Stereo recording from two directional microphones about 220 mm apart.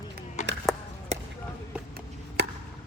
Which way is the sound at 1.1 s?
30° right (ahead or behind).